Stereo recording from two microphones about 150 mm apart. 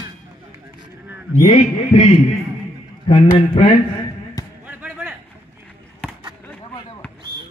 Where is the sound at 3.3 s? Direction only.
35° left (ahead or behind).